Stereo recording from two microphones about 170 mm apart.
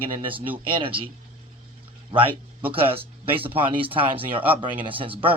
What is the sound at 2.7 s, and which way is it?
Speech, 35° right (ahead or behind).